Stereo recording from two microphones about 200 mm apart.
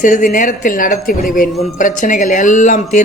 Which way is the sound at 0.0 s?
40° left (ahead or behind).